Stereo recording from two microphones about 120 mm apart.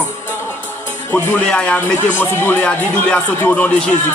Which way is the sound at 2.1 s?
20° left (ahead or behind).